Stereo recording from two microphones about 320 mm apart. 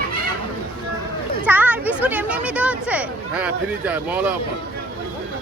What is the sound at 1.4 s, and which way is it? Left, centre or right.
Speech, centre.